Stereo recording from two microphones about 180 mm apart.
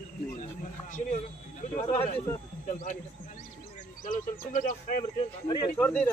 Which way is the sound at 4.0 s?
50° left (ahead or behind).